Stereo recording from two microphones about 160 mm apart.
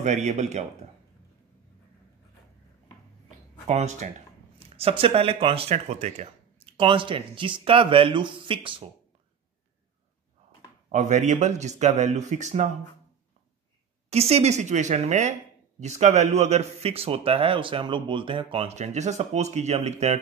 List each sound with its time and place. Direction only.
0.0 s speech: 45° right (ahead or behind)
3.3 s a sound: 45° right (ahead or behind)
4.6 s speech: 40° right (ahead or behind)
10.9 s speech: 50° right (ahead or behind)
14.1 s speech: 40° right (ahead or behind)